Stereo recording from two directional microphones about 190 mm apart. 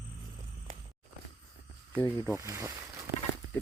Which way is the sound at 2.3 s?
15° right (ahead or behind).